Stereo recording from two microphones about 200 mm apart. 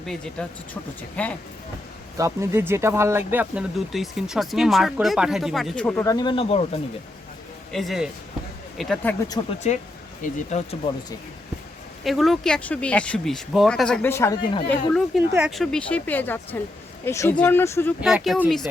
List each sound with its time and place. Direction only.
0.0 s speech: 5° left (ahead or behind)
2.1 s speech: 15° right (ahead or behind); by 6.7 s 30° left (ahead or behind)
7.7 s speech: centre (ahead or behind)
9.7 s speech: 35° left (ahead or behind)
12.0 s speech: centre (ahead or behind)
14.7 s speech: centre (ahead or behind)
18.0 s speech: centre (ahead or behind)